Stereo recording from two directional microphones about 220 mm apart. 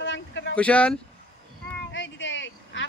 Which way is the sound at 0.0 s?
55° left (ahead or behind).